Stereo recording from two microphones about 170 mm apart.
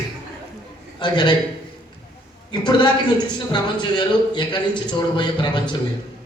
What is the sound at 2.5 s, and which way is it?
A man's voice, 25° left (ahead or behind).